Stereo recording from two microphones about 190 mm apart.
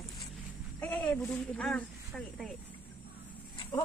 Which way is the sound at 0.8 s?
5° left (ahead or behind).